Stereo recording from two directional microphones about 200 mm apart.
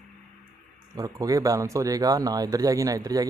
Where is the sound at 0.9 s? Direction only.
20° right (ahead or behind).